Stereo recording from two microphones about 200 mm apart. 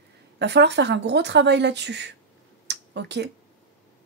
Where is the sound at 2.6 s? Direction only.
60° right (ahead or behind).